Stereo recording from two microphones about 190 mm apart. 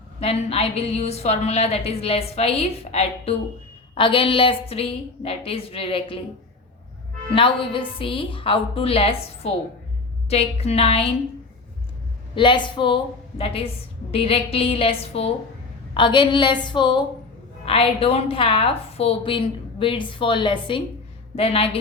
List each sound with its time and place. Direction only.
0.2 s a woman's voice: 30° left (ahead or behind)
7.3 s a woman's voice: 25° left (ahead or behind)
12.3 s a woman's voice: 25° left (ahead or behind)